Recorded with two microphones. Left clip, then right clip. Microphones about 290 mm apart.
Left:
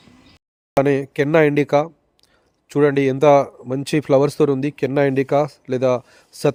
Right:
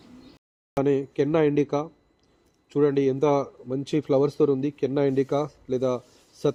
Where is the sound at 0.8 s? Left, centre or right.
Left.